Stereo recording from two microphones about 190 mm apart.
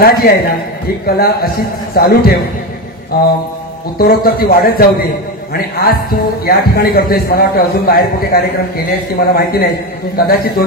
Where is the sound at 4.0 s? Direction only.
50° left (ahead or behind).